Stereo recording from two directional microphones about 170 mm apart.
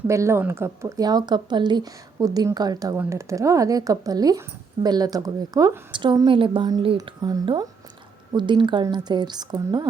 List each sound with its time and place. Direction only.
0.1 s speech: 15° right (ahead or behind)